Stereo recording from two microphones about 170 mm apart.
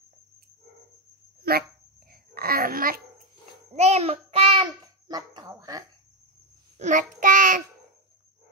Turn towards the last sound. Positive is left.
turn(degrees=-50)  # may be behind; listen again after turning